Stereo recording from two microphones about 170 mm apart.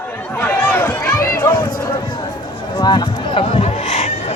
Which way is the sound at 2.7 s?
25° left (ahead or behind).